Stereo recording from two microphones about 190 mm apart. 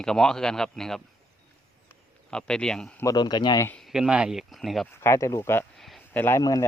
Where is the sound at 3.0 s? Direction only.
20° left (ahead or behind).